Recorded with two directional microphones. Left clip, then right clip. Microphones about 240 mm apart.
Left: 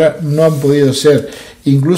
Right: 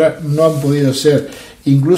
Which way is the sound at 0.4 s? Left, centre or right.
Left.